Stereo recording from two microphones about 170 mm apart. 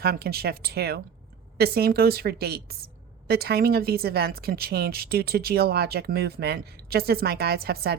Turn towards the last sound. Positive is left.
turn(degrees=-65)  # may be behind; listen again after turning